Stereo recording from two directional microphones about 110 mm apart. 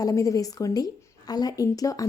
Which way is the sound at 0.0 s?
30° left (ahead or behind).